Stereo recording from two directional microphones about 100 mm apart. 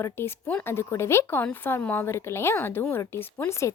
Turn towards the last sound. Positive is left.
turn(degrees=30)  # may be behind; listen again after turning